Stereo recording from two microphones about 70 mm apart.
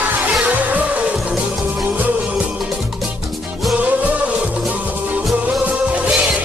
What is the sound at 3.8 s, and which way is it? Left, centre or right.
Music, right.